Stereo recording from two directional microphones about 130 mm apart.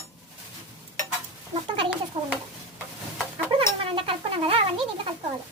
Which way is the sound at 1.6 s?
40° right (ahead or behind).